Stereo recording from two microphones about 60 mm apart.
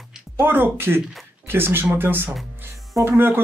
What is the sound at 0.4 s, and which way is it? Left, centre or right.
Speech, right.